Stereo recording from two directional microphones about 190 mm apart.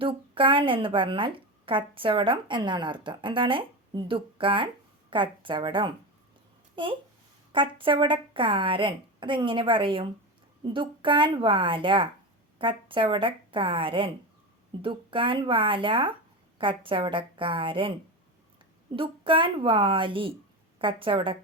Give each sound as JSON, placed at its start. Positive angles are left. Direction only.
{"t": 0.0, "sound": "speech", "side_deg": -25}
{"t": 7.5, "sound": "speech", "side_deg": -25}